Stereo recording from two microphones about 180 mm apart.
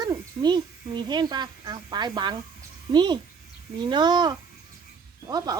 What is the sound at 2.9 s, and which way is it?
Speech, 25° right (ahead or behind).